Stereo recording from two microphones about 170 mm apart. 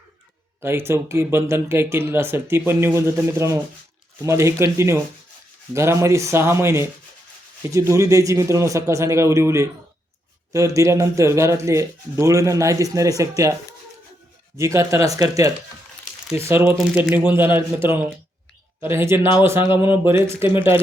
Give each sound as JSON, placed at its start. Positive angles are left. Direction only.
{"t": 0.6, "sound": "speech", "side_deg": -15}
{"t": 18.9, "sound": "speech", "side_deg": -15}